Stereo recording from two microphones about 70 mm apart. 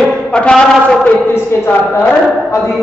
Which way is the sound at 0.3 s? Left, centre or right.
Centre.